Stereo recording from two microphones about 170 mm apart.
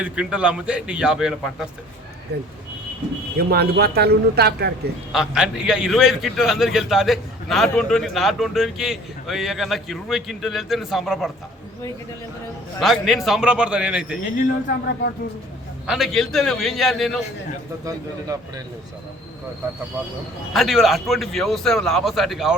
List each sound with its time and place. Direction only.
0.0 s a man's voice: 5° right (ahead or behind)
2.3 s a man's voice: 70° right (ahead or behind)
5.1 s a man's voice: 5° right (ahead or behind)
12.8 s a man's voice: centre (ahead or behind)
15.9 s a man's voice: centre (ahead or behind)
17.8 s speech: 20° right (ahead or behind)
20.5 s a man's voice: centre (ahead or behind)